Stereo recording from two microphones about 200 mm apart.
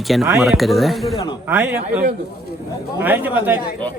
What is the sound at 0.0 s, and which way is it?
A man's voice, centre (ahead or behind).